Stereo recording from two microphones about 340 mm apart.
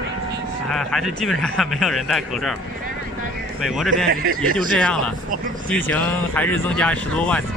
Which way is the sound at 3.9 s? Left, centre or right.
Right.